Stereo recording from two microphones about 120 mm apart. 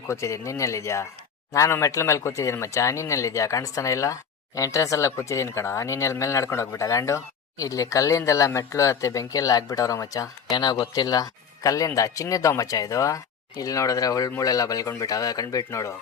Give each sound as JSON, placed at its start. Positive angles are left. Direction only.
{"t": 0.1, "sound": "speech", "side_deg": 25}